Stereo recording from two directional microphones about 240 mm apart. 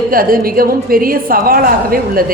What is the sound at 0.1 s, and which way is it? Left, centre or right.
Speech, right.